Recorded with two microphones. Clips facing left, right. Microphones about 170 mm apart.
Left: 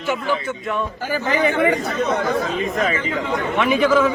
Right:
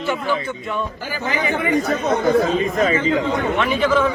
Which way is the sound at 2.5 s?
35° right (ahead or behind).